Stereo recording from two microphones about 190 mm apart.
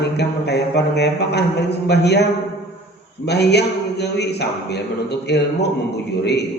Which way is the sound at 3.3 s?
60° left (ahead or behind).